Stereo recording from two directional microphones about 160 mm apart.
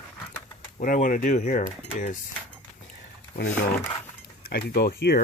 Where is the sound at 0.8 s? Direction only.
55° left (ahead or behind).